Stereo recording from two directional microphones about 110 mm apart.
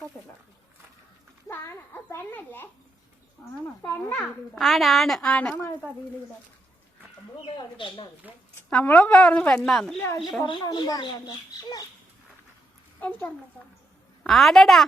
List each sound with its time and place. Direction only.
1.5 s a sound: 20° left (ahead or behind)
3.8 s a woman's voice: 15° left (ahead or behind)
4.5 s a woman's voice: centre (ahead or behind)
7.4 s speech: 50° left (ahead or behind)
8.2 s speech: 15° right (ahead or behind)
8.7 s a woman's voice: 15° left (ahead or behind)
10.4 s speech: 45° left (ahead or behind)
13.0 s a woman's voice: 15° left (ahead or behind)
14.3 s a woman's voice: centre (ahead or behind)